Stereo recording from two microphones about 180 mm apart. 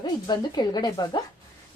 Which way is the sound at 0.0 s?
25° left (ahead or behind).